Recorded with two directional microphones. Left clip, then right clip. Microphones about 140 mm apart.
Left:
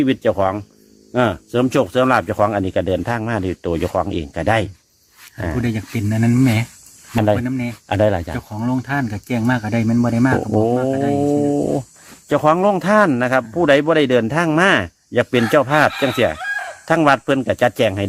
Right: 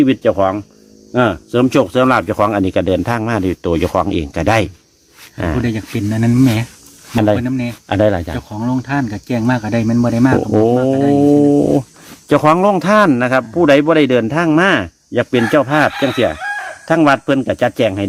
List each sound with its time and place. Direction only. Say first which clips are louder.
0.0 s speech: right 4 dB; 15° left (ahead or behind); by 4.7 s centre (ahead or behind)
5.6 s speech: right 4 dB; 35° left (ahead or behind)
7.1 s speech: right 3 dB; centre (ahead or behind)
7.3 s a man's voice: right 4 dB; 30° left (ahead or behind)
7.9 s speech: right 3 dB; centre (ahead or behind)
8.4 s speech: right 3 dB; 35° left (ahead or behind)
10.5 s speech: right 5 dB; centre (ahead or behind)
12.9 s a man's voice: right 2 dB; 15° left (ahead or behind); by 15.9 s 35° left (ahead or behind)
15.9 s speech: right 2 dB; 90° left
16.1 s speech: right 2 dB; 35° left (ahead or behind)